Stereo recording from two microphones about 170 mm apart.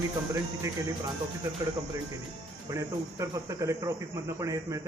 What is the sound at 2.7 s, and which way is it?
A man's voice, 20° right (ahead or behind).